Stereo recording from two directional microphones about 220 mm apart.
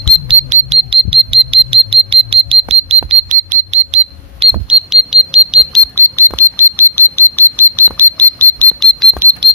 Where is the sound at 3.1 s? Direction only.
35° right (ahead or behind).